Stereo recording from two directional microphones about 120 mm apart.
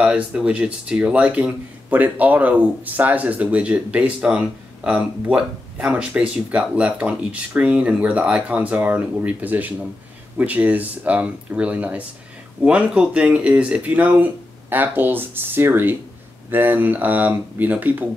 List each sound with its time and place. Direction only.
0.0 s speech: 10° right (ahead or behind)